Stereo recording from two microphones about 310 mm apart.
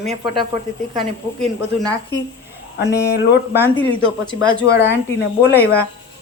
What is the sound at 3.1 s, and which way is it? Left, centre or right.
Speech, left.